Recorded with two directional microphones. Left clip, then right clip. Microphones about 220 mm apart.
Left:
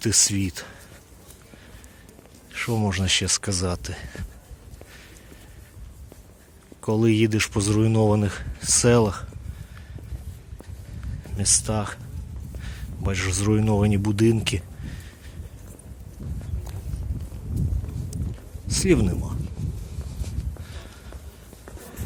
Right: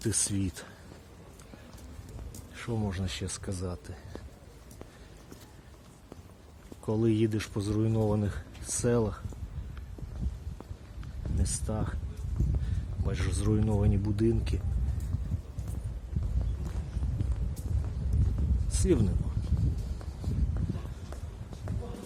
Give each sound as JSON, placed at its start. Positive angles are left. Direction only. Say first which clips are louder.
{"t": 0.0, "sound": "speech", "louder": "left 10 dB", "side_deg": 20}
{"t": 2.6, "sound": "speech", "louder": "left 10 dB", "side_deg": 25}
{"t": 6.8, "sound": "speech", "louder": "left 7 dB", "side_deg": 20}
{"t": 11.3, "sound": "speech", "louder": "left 13 dB", "side_deg": 25}
{"t": 13.1, "sound": "speech", "louder": "left 9 dB", "side_deg": 20}
{"t": 18.7, "sound": "speech", "louder": "left 8 dB", "side_deg": 20}